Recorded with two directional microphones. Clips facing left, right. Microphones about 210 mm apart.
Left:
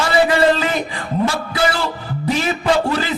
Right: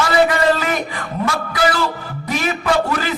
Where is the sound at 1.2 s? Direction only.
30° left (ahead or behind).